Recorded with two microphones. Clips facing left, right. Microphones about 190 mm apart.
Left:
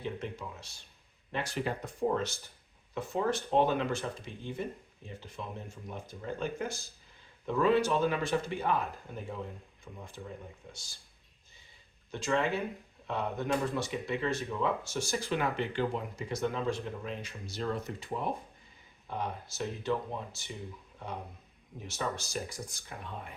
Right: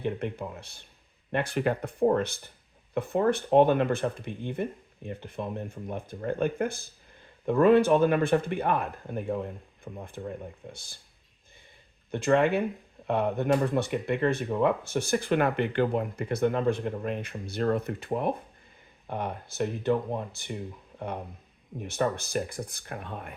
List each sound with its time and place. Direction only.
0.0 s speech: 60° right (ahead or behind)
12.1 s speech: 60° right (ahead or behind)
21.8 s speech: 55° right (ahead or behind)